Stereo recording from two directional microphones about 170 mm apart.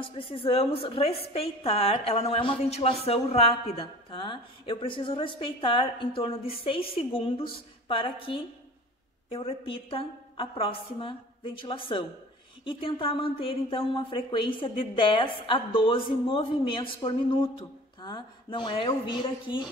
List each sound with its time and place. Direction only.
0.0 s a woman's voice: 30° left (ahead or behind)